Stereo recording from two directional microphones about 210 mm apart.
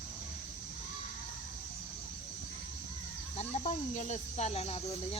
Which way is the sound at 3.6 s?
35° left (ahead or behind).